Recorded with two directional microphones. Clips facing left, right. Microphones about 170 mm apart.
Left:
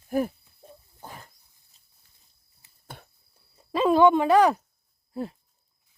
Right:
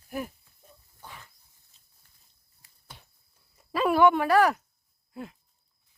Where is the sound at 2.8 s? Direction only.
55° left (ahead or behind).